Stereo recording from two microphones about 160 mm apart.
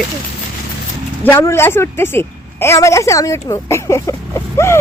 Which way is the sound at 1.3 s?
15° left (ahead or behind).